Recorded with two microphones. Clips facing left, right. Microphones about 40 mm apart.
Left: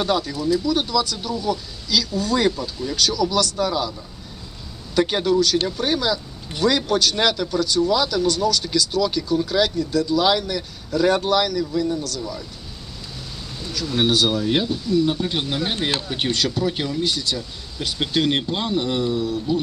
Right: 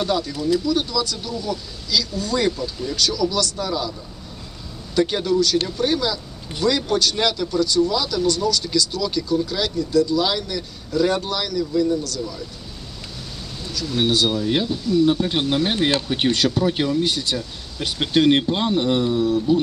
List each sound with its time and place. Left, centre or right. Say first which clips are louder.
0.0 s speech: even; centre
4.9 s a man's voice: left 1 dB; centre
13.7 s a man's voice: left 1 dB; centre
15.1 s speech: right 4 dB; centre
16.3 s speech: right 1 dB; right
16.6 s speech: right 3 dB; centre
17.0 s speech: right 1 dB; right